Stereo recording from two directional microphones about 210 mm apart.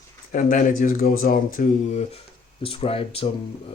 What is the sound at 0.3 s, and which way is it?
Speech, 40° left (ahead or behind).